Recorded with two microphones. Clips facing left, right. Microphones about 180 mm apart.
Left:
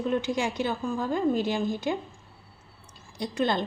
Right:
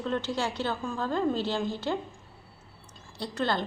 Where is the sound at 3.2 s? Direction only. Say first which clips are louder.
Left 3 dB; 15° left (ahead or behind).